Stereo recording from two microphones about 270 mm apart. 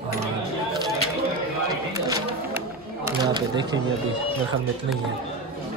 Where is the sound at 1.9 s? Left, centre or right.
Centre.